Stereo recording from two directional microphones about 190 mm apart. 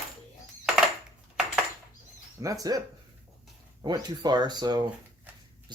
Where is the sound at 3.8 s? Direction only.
20° right (ahead or behind).